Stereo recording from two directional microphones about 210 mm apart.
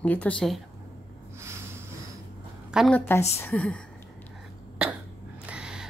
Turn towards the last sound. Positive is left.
turn(degrees=-5)  # may be behind; listen again after turning